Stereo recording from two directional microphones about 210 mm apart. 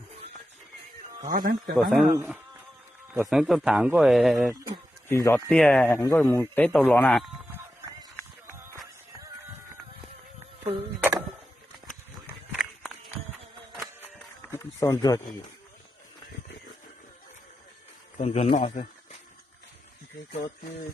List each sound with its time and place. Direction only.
1.2 s speech: 40° right (ahead or behind)
1.7 s a man's voice: centre (ahead or behind)
5.0 s a man's voice: 10° left (ahead or behind)
7.5 s horse: 15° right (ahead or behind)
8.4 s music: 10° right (ahead or behind)
11.0 s a sound: 10° right (ahead or behind)
12.5 s walk: centre (ahead or behind)
14.0 s a sound: 10° left (ahead or behind)
18.2 s a man's voice: 30° left (ahead or behind)